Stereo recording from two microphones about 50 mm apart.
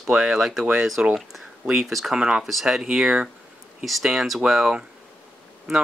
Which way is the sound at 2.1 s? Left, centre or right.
Centre.